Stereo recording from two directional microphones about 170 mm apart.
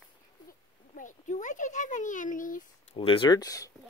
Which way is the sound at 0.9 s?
50° left (ahead or behind).